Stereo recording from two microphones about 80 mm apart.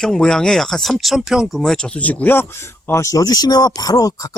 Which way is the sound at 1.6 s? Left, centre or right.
Centre.